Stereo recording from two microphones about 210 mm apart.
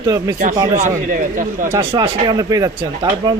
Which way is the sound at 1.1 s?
40° right (ahead or behind).